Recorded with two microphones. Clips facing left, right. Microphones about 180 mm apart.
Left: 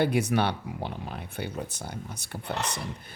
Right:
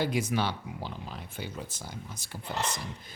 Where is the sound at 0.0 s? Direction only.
65° left (ahead or behind).